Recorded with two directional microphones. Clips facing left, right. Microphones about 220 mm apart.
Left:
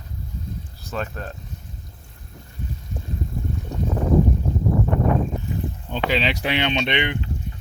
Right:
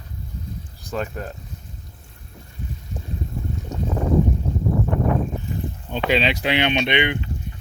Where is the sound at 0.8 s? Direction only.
15° right (ahead or behind).